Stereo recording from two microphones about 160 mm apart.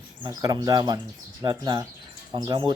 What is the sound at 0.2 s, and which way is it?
Speech, 25° right (ahead or behind).